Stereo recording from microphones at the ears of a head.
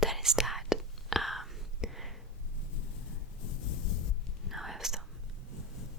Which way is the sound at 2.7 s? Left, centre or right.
Left.